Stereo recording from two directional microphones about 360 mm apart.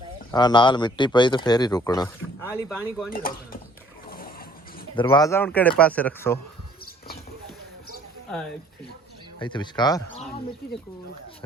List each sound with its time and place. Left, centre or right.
0.3 s speech: centre
3.1 s speech: left
4.9 s speech: centre
9.4 s speech: centre